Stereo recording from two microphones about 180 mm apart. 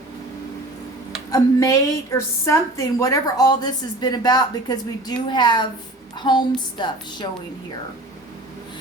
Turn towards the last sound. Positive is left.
turn(degrees=25)  # may be behind; listen again after turning